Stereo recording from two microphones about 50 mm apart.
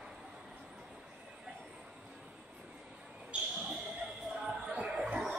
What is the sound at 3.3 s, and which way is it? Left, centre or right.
Basketball bounce, right.